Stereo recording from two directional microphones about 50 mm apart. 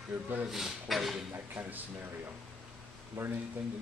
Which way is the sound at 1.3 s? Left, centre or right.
Right.